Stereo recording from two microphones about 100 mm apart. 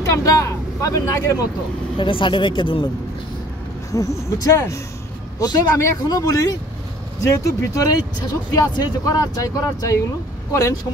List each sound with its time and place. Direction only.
0.1 s speech: 35° left (ahead or behind)
2.0 s speech: 55° left (ahead or behind)
3.9 s speech: 35° left (ahead or behind)